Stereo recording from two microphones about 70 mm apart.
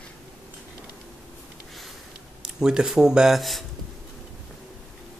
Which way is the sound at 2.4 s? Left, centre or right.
Centre.